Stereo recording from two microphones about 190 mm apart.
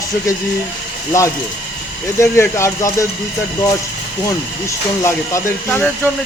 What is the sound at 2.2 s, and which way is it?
Speech, 15° left (ahead or behind).